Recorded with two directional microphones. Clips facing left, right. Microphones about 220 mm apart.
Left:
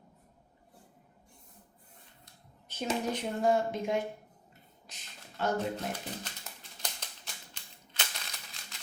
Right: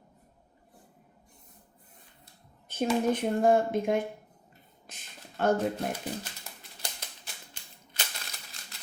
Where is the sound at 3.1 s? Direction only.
55° right (ahead or behind).